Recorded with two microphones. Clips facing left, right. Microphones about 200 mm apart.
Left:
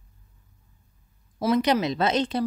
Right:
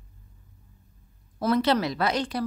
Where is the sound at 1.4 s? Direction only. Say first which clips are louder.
Left 1 dB; 15° left (ahead or behind).